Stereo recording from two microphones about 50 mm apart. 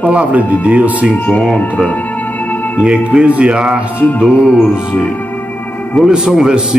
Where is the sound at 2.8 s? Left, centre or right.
Centre.